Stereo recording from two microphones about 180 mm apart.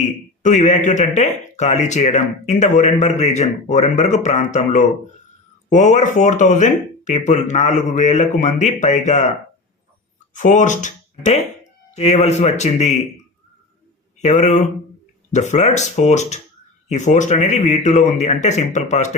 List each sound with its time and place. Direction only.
0.4 s speech: 45° left (ahead or behind)
10.3 s speech: 45° left (ahead or behind)
14.2 s speech: 40° left (ahead or behind)